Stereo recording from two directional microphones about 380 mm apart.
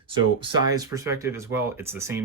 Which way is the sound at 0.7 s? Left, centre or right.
Centre.